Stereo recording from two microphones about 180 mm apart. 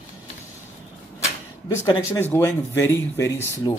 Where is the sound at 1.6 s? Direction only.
20° left (ahead or behind).